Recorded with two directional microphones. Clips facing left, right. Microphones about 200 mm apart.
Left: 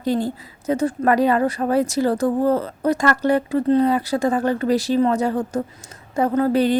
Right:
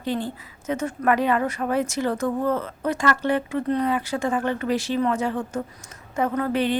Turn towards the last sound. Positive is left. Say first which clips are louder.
# left 5 dB
turn(degrees=40)  # may be behind; listen again after turning